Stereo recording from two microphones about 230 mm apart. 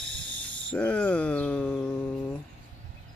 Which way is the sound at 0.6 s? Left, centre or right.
Centre.